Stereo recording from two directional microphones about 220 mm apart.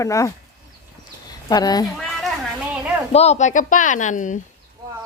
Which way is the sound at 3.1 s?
30° left (ahead or behind).